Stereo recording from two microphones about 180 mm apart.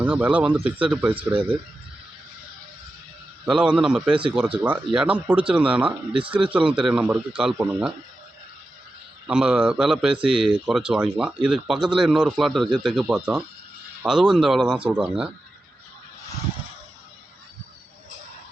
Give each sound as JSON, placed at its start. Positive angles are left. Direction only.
{"t": 0.0, "sound": "speech", "side_deg": -5}
{"t": 3.4, "sound": "speech", "side_deg": -5}
{"t": 9.2, "sound": "speech", "side_deg": -5}